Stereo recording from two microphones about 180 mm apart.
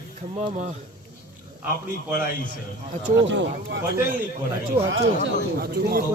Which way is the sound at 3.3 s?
90° right.